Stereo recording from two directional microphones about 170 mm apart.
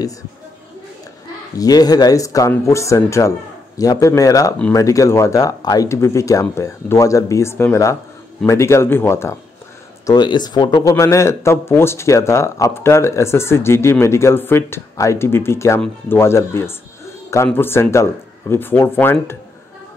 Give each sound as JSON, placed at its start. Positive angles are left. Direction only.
{"t": 1.6, "sound": "speech", "side_deg": 20}
{"t": 10.0, "sound": "speech", "side_deg": 25}